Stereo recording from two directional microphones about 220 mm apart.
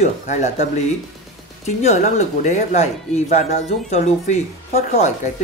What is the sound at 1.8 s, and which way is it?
Speech, 30° left (ahead or behind).